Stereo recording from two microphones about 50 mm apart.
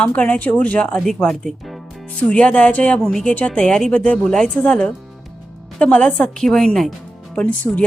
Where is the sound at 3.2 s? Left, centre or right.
Left.